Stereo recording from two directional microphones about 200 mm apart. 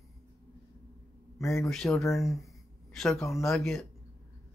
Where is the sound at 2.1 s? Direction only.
Centre (ahead or behind).